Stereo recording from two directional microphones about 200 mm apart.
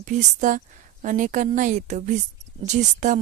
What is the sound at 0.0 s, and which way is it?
Speech, 40° right (ahead or behind).